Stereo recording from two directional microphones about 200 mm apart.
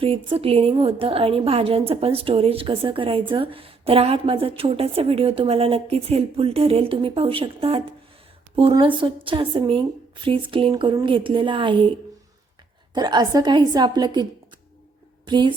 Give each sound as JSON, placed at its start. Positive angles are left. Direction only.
{"t": 0.0, "sound": "a woman's voice", "side_deg": -25}
{"t": 15.3, "sound": "a woman's voice", "side_deg": -25}